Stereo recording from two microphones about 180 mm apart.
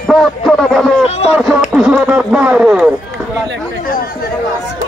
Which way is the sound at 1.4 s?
Centre (ahead or behind).